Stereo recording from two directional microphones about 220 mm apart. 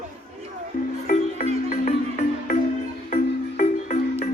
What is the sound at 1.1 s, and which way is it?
Music, 35° left (ahead or behind).